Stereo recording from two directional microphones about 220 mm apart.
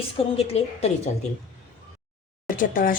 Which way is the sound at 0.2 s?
25° left (ahead or behind).